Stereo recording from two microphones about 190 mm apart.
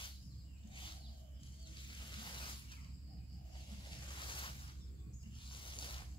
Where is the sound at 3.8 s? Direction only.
25° left (ahead or behind).